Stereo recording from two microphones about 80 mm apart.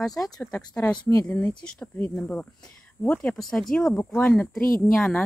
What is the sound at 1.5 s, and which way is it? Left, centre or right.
A woman's voice, centre.